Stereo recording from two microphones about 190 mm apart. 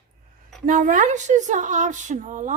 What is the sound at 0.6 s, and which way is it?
A woman's voice, 45° right (ahead or behind).